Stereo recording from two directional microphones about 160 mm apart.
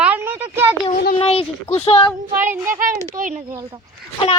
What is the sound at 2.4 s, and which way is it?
Speech, 15° right (ahead or behind).